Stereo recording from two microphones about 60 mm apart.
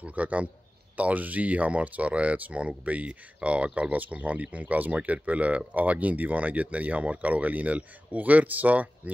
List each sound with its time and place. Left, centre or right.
0.0 s speech: right